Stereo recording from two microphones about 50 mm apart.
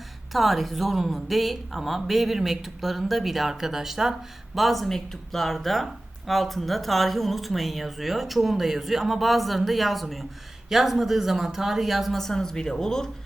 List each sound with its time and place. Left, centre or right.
0.3 s speech: centre